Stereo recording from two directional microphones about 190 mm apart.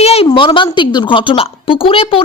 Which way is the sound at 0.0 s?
35° left (ahead or behind).